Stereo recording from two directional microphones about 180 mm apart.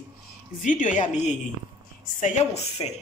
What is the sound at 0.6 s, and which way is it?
Speech, 45° left (ahead or behind).